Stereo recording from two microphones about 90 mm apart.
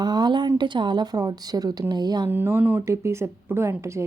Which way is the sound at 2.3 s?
25° right (ahead or behind).